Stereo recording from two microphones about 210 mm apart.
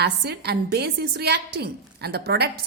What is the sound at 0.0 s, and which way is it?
A woman's voice, 50° right (ahead or behind).